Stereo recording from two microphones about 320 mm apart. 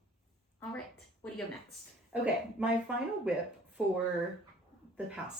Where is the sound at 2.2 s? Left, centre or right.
Centre.